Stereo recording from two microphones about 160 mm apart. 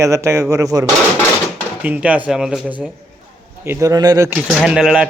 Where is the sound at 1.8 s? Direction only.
10° right (ahead or behind).